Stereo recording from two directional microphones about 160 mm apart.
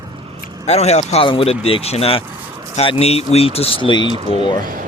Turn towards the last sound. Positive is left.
turn(degrees=-60)  # may be behind; listen again after turning